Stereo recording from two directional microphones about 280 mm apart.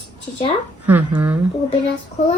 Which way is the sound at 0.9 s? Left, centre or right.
Centre.